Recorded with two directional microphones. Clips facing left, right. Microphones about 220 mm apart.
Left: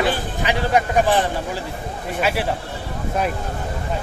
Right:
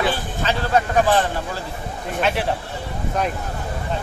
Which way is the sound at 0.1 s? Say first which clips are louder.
Left 1 dB; 15° left (ahead or behind).